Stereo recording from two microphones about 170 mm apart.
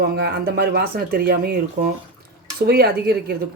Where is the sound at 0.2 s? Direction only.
65° right (ahead or behind).